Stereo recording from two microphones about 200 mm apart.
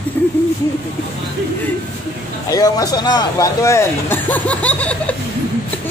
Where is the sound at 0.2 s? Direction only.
10° left (ahead or behind).